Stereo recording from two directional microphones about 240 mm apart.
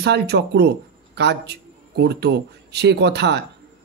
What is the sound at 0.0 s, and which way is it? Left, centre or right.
Speech, right.